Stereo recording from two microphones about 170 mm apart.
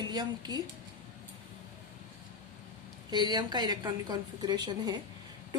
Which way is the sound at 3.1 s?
25° right (ahead or behind).